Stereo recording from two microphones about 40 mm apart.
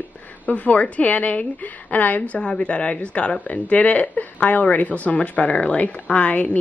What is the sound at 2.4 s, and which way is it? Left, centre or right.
Speech, left.